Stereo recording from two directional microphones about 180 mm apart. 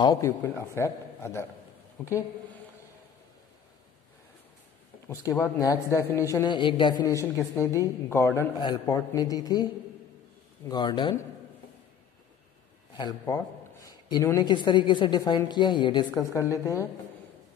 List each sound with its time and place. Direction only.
0.0 s a man's voice: 20° left (ahead or behind)
5.0 s a man's voice: 20° left (ahead or behind)
10.7 s a woman's voice: 25° left (ahead or behind)
14.0 s a woman's voice: 20° left (ahead or behind)